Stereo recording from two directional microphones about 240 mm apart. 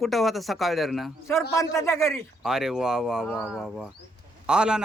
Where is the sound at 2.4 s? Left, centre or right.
Centre.